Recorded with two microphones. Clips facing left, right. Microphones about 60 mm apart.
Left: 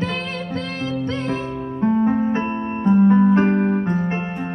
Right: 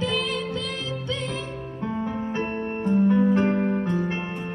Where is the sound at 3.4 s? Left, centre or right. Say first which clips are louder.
Left 5 dB; left.